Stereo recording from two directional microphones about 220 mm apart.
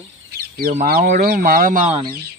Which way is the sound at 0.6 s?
40° right (ahead or behind).